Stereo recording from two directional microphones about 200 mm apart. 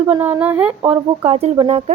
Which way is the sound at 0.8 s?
30° right (ahead or behind).